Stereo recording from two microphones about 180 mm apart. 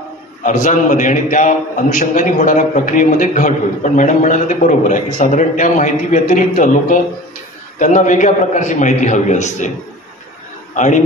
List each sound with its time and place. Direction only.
0.4 s a man's voice: 45° left (ahead or behind)